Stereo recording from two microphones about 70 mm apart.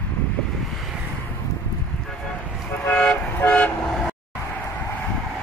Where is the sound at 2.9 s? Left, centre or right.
Centre.